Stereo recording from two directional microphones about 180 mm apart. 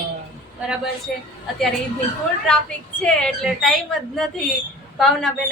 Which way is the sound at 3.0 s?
5° left (ahead or behind).